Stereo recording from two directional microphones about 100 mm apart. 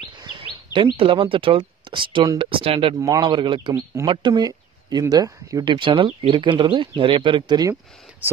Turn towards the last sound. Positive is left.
turn(degrees=-55)  # may be behind; listen again after turning